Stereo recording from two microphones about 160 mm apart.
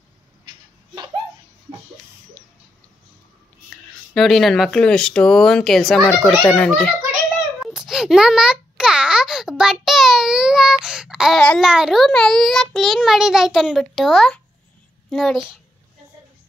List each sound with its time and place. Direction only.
0.5 s hiccup: 25° right (ahead or behind)
3.7 s speech: centre (ahead or behind)
7.6 s a sound: centre (ahead or behind)
15.0 s speech: 5° left (ahead or behind)